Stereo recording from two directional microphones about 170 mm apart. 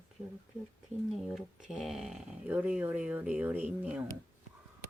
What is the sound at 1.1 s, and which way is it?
Speech, centre (ahead or behind).